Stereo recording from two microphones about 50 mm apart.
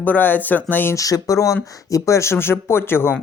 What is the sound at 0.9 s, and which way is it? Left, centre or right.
Speech, left.